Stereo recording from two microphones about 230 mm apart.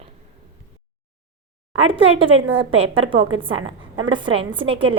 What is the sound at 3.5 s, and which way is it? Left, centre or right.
Speech, right.